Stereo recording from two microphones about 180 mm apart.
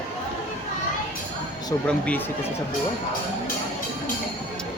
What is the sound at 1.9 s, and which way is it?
Speech, 5° left (ahead or behind).